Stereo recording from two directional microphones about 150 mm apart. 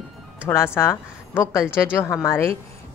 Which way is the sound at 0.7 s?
15° left (ahead or behind).